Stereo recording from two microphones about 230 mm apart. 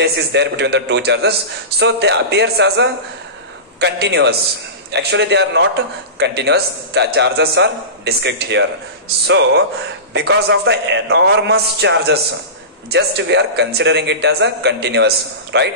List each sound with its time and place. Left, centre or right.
0.0 s a man's voice: right